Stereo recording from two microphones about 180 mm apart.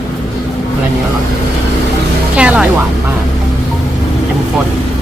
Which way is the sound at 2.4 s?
5° right (ahead or behind).